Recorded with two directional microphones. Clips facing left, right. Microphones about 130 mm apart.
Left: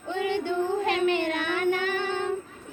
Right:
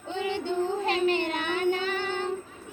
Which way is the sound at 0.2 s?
25° right (ahead or behind).